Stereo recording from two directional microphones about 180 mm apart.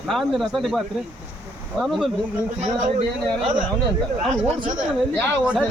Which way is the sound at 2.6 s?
45° right (ahead or behind).